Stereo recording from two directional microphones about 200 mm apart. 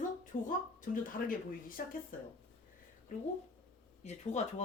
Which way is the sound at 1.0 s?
45° left (ahead or behind).